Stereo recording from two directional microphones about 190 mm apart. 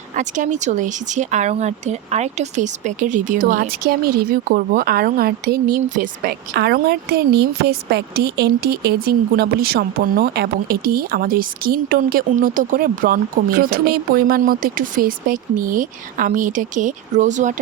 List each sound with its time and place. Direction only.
0.1 s speech: 40° right (ahead or behind)